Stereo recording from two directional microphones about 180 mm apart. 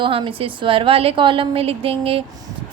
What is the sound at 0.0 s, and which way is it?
A woman's voice, 30° right (ahead or behind).